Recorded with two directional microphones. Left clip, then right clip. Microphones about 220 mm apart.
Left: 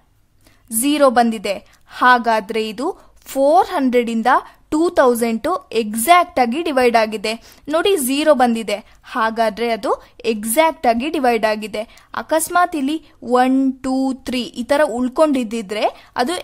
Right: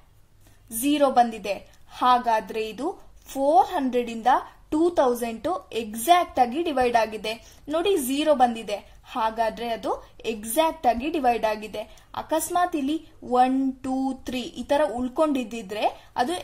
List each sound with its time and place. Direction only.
0.7 s a woman's voice: 45° left (ahead or behind)